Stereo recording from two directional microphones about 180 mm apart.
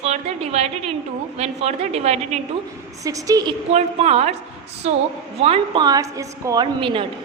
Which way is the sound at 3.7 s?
35° right (ahead or behind).